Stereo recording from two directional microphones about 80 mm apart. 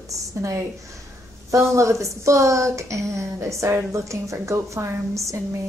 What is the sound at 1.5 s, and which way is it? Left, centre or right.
A woman's voice, right.